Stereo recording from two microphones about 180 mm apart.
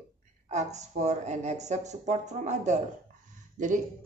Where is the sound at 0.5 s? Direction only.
40° right (ahead or behind).